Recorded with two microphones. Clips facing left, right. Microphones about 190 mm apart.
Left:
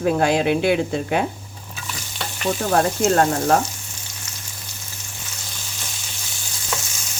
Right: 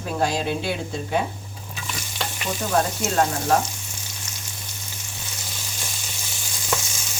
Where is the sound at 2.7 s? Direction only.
55° left (ahead or behind).